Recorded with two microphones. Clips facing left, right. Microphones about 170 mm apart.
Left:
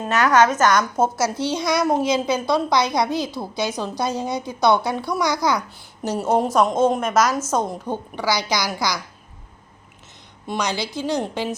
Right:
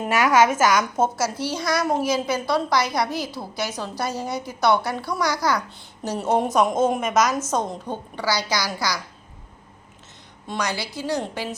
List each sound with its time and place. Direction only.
0.0 s a woman's voice: 10° right (ahead or behind)
1.1 s a woman's voice: 10° right (ahead or behind)
1.5 s a woman's voice: 15° left (ahead or behind)
7.3 s a woman's voice: 15° right (ahead or behind)
7.5 s a woman's voice: 10° left (ahead or behind)
10.4 s a woman's voice: 15° left (ahead or behind)